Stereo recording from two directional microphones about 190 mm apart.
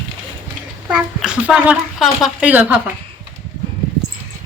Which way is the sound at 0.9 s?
5° right (ahead or behind).